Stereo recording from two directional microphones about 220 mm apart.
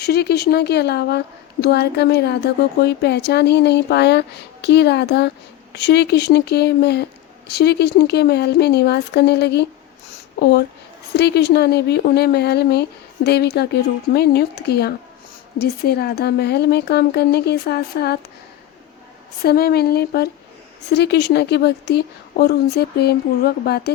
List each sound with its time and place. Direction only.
0.0 s speech: 45° left (ahead or behind)
19.5 s speech: 45° left (ahead or behind)